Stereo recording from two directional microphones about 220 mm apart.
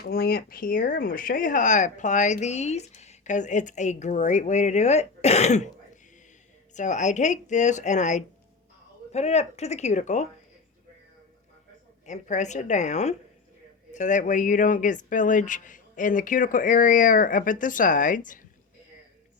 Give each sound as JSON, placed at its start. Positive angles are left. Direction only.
{"t": 0.0, "sound": "speech", "side_deg": 45}
{"t": 12.0, "sound": "speech", "side_deg": 30}